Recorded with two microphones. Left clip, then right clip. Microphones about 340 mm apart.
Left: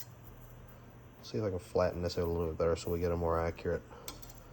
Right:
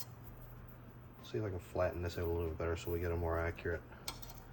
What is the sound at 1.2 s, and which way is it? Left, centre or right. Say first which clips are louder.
Speech: left 6 dB; left.